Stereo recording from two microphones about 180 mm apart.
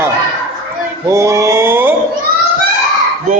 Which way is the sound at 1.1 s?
15° right (ahead or behind).